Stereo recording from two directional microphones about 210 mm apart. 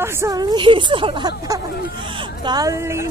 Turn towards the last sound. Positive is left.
turn(degrees=-15)  # may be behind; listen again after turning